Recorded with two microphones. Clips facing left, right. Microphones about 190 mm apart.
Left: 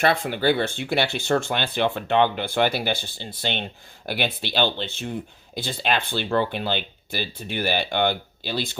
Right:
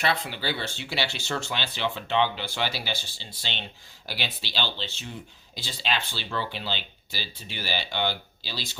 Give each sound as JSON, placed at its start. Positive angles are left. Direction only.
{"t": 0.0, "sound": "speech", "side_deg": 50}